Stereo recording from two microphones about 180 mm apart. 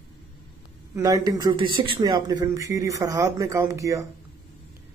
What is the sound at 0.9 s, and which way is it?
Speech, 20° right (ahead or behind).